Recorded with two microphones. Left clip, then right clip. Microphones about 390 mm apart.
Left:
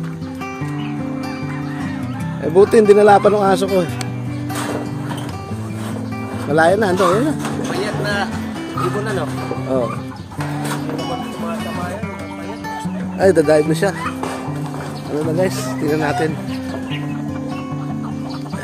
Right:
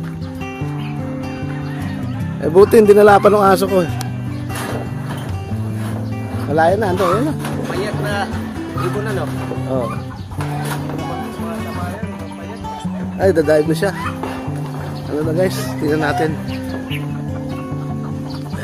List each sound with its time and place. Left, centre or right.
2.5 s speech: centre
6.5 s speech: centre
13.2 s speech: centre
15.3 s speech: centre